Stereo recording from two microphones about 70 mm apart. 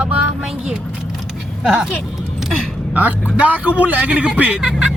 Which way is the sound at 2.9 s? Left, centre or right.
Right.